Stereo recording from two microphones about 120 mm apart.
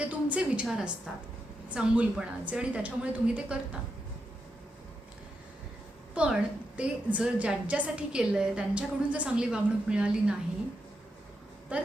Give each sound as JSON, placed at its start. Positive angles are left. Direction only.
{"t": 0.0, "sound": "a woman's voice", "side_deg": -10}
{"t": 6.1, "sound": "a woman's voice", "side_deg": -10}
{"t": 11.7, "sound": "speech", "side_deg": -10}